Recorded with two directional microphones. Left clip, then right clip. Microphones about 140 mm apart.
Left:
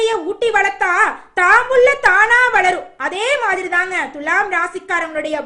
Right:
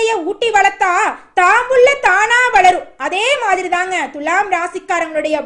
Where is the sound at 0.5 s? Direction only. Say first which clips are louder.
Right 4 dB; 25° right (ahead or behind).